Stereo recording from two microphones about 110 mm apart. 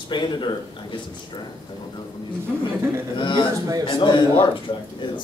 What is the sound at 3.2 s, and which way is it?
Speech, 45° left (ahead or behind).